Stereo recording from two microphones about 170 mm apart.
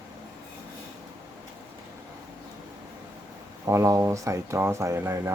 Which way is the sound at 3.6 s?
20° right (ahead or behind).